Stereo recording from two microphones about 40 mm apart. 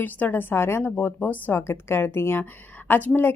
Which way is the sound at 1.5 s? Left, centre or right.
Left.